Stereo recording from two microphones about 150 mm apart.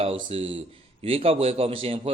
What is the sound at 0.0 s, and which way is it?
A man's voice, 40° right (ahead or behind).